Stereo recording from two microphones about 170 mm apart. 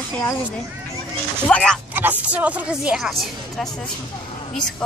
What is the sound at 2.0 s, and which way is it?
Speech, 10° right (ahead or behind).